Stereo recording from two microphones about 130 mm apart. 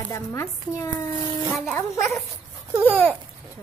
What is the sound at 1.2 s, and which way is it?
Speech, 35° right (ahead or behind).